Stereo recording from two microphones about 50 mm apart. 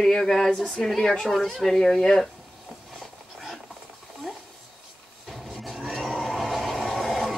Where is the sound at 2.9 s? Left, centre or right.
Centre.